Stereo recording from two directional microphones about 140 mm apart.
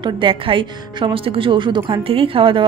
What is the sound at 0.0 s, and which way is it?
Speech, 35° right (ahead or behind).